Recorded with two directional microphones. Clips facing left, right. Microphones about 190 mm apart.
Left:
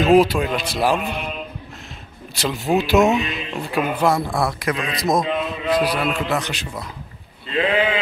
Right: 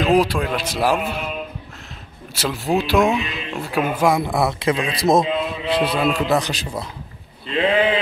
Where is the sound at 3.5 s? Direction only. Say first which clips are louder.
Right 1 dB; 10° right (ahead or behind).